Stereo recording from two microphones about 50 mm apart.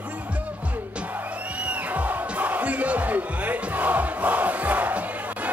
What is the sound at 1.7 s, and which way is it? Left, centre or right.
Music, right.